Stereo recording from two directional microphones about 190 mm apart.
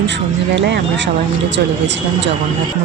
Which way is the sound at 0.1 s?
70° right (ahead or behind).